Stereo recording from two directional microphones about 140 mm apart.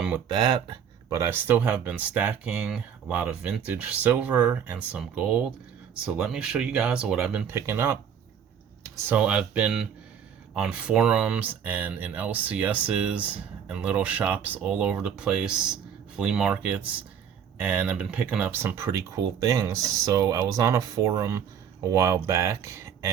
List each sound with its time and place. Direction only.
0.3 s speech: 30° right (ahead or behind)
1.2 s speech: 15° right (ahead or behind)
7.4 s speech: 20° right (ahead or behind)
9.0 s speech: 10° right (ahead or behind)